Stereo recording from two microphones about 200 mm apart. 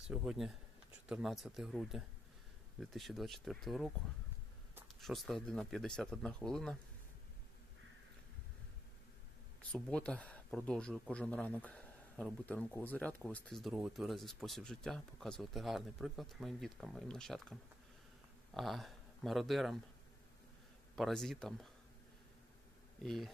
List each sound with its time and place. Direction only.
0.1 s speech: centre (ahead or behind)
9.7 s speech: 5° left (ahead or behind)
20.9 s speech: centre (ahead or behind)
23.0 s speech: centre (ahead or behind)